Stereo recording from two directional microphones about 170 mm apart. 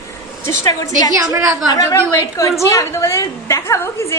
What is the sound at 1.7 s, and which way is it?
A woman's voice, 20° left (ahead or behind).